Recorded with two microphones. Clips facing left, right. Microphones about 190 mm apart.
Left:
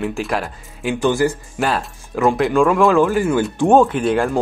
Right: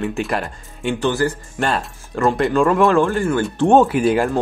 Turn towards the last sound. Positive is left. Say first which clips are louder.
# right 1 dB
turn(degrees=-5)  # may be behind; listen again after turning